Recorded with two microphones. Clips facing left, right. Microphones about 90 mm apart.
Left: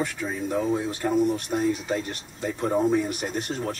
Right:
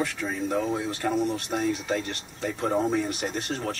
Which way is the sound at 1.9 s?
20° left (ahead or behind).